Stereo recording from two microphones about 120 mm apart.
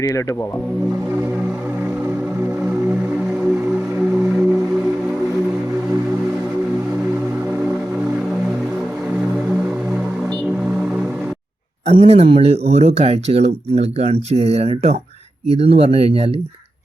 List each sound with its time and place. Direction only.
11.9 s speech: 60° right (ahead or behind)